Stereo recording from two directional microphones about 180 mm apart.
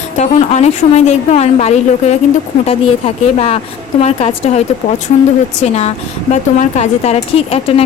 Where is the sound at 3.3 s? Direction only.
35° left (ahead or behind).